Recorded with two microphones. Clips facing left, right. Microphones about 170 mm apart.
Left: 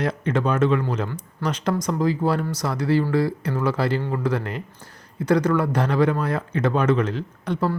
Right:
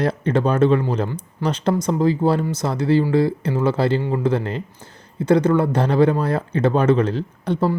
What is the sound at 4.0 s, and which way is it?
Speech, 15° right (ahead or behind).